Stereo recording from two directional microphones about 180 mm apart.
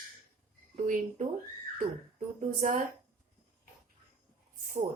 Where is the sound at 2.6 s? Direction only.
45° right (ahead or behind).